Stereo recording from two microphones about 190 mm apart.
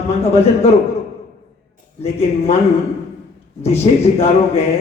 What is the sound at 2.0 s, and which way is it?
Speech, 35° left (ahead or behind).